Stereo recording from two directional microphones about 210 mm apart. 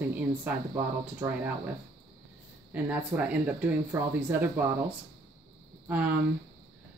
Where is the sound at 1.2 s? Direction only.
10° right (ahead or behind).